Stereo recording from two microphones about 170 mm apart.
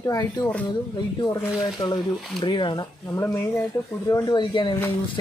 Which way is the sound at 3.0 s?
15° left (ahead or behind).